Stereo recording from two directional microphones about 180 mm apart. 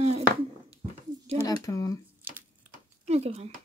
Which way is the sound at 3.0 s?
35° right (ahead or behind).